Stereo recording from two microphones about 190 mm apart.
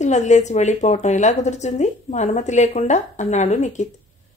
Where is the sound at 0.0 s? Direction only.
40° left (ahead or behind).